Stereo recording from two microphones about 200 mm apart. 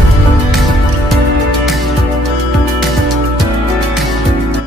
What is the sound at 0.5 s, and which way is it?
Music, centre (ahead or behind).